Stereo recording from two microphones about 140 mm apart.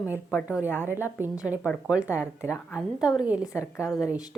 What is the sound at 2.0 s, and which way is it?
Speech, 20° left (ahead or behind).